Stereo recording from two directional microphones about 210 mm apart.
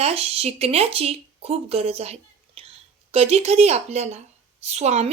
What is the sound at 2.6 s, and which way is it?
Whispering, 25° right (ahead or behind).